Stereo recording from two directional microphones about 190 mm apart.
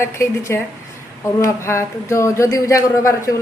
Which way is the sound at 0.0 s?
15° left (ahead or behind).